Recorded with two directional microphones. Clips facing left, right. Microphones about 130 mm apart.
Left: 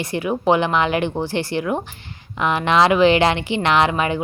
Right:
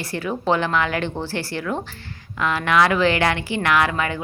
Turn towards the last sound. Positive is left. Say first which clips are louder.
# left 3 dB
turn(degrees=20)  # may be behind; listen again after turning